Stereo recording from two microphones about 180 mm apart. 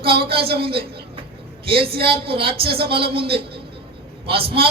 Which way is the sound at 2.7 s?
60° right (ahead or behind).